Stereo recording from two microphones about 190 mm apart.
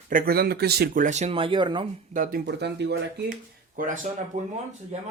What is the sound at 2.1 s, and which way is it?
Speech, 45° right (ahead or behind).